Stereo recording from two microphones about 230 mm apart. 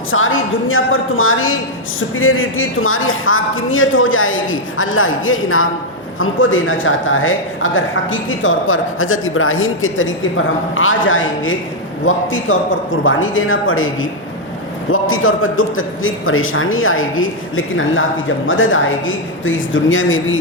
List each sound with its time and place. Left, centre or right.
0.1 s speech: left